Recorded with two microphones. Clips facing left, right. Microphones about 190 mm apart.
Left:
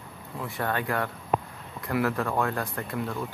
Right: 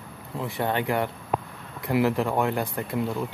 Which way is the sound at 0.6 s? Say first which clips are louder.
Right 3 dB; 25° right (ahead or behind).